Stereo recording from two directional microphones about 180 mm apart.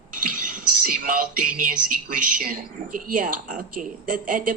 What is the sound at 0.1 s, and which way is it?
A woman's voice, 50° right (ahead or behind).